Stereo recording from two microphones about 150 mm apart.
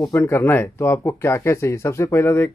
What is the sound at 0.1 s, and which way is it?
Speech, 20° left (ahead or behind).